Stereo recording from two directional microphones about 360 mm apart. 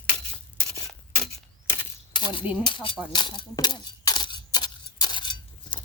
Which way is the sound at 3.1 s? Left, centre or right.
Centre.